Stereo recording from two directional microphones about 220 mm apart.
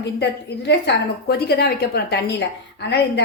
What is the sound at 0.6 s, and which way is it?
A woman's voice, 50° left (ahead or behind).